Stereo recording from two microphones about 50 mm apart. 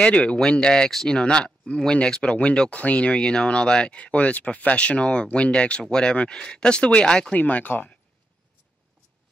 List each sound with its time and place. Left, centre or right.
0.0 s speech: left
2.8 s speech: left
7.3 s speech: left